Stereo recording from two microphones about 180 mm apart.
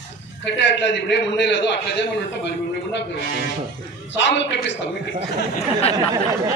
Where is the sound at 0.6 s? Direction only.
80° left.